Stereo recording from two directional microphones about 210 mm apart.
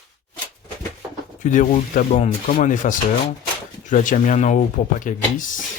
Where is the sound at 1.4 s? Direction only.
35° left (ahead or behind).